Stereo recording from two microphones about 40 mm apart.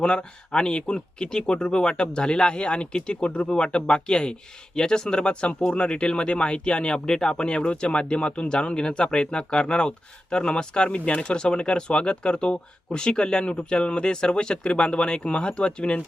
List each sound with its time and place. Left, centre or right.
0.0 s speech: left